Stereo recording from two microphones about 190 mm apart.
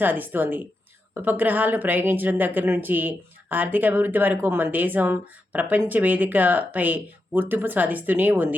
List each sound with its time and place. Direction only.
0.0 s a woman's voice: 10° right (ahead or behind)